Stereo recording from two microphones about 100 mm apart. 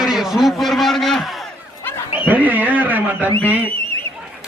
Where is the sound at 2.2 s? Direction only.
15° right (ahead or behind).